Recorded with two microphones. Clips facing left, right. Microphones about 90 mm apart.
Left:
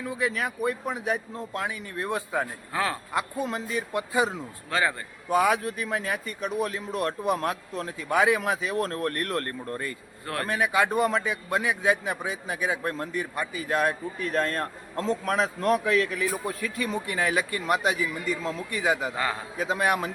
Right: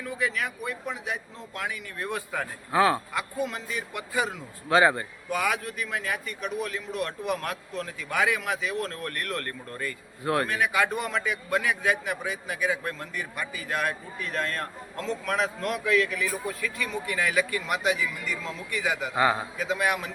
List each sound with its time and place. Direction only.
0.0 s a man's voice: 30° left (ahead or behind)
2.7 s a man's voice: 20° right (ahead or behind)
3.1 s a man's voice: 30° left (ahead or behind)
4.7 s a man's voice: 20° right (ahead or behind)
5.3 s a man's voice: 30° left (ahead or behind)
19.1 s a man's voice: 15° right (ahead or behind)
19.5 s a man's voice: 35° left (ahead or behind)